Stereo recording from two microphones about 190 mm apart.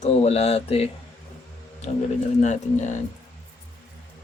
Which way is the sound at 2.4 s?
40° left (ahead or behind).